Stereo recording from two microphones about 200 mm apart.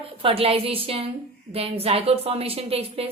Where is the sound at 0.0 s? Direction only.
25° right (ahead or behind).